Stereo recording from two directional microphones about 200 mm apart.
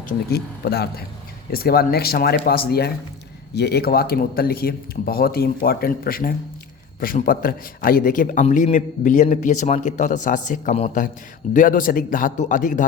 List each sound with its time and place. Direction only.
0.1 s a man's voice: 50° left (ahead or behind)